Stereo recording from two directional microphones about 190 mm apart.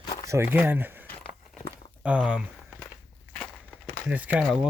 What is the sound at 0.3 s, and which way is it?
Speech, 10° right (ahead or behind).